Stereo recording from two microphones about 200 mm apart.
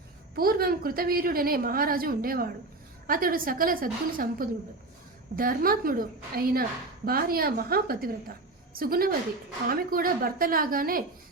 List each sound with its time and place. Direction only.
0.3 s a woman's voice: 50° right (ahead or behind)